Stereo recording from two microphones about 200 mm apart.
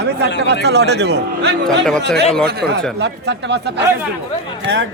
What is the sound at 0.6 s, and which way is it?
Speech, 55° right (ahead or behind).